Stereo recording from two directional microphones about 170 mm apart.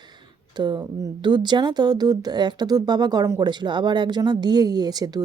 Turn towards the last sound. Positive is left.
turn(degrees=-25)  # may be behind; listen again after turning